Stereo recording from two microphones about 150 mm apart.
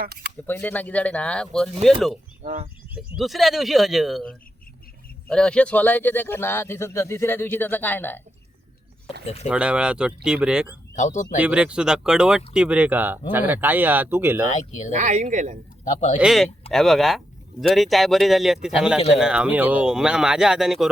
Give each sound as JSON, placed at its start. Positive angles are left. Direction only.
{"t": 0.0, "sound": "speech", "side_deg": -90}
{"t": 0.4, "sound": "a man's voice", "side_deg": 10}
{"t": 2.4, "sound": "speech", "side_deg": -65}
{"t": 2.9, "sound": "a man's voice", "side_deg": -5}
{"t": 9.2, "sound": "speech", "side_deg": 45}
{"t": 9.5, "sound": "speech", "side_deg": -5}
{"t": 10.9, "sound": "speech", "side_deg": 55}
{"t": 11.3, "sound": "speech", "side_deg": -10}
{"t": 14.5, "sound": "speech", "side_deg": 50}
{"t": 14.9, "sound": "speech", "side_deg": -50}
{"t": 15.8, "sound": "speech", "side_deg": 55}
{"t": 16.1, "sound": "speech", "side_deg": 0}